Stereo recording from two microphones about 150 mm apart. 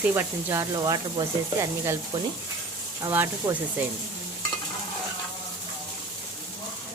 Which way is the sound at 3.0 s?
15° right (ahead or behind).